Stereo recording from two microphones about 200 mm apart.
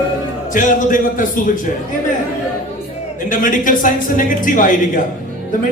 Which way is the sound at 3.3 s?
40° left (ahead or behind).